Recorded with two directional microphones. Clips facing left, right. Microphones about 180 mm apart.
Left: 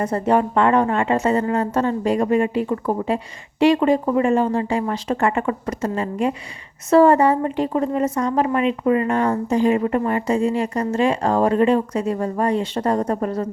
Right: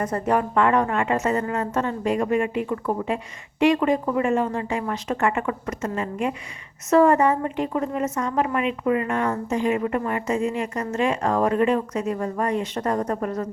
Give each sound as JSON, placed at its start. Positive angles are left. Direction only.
{"t": 0.0, "sound": "a woman's voice", "side_deg": 30}